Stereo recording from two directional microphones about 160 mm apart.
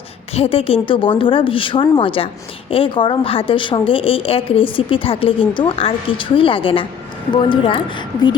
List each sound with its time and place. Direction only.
0.3 s speech: 40° left (ahead or behind)